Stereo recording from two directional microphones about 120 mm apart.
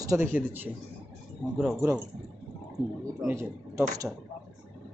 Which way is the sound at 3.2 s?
25° right (ahead or behind).